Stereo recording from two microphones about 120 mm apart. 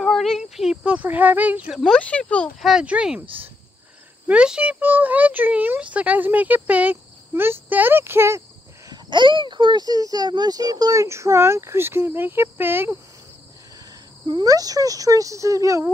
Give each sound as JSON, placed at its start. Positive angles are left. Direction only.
{"t": 0.0, "sound": "speech", "side_deg": 0}
{"t": 1.8, "sound": "speech", "side_deg": 5}
{"t": 2.6, "sound": "speech", "side_deg": -5}
{"t": 8.8, "sound": "speech", "side_deg": -40}
{"t": 13.7, "sound": "speech", "side_deg": -35}